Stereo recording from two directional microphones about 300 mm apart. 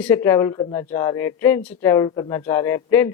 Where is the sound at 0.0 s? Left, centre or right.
Centre.